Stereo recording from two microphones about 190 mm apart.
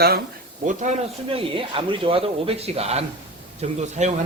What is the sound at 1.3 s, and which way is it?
Speech, 30° right (ahead or behind).